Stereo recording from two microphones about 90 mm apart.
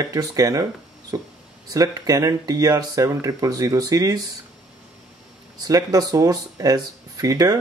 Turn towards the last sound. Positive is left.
turn(degrees=-45)  # may be behind; listen again after turning